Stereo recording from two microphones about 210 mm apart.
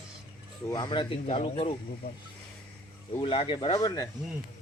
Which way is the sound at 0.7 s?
20° left (ahead or behind).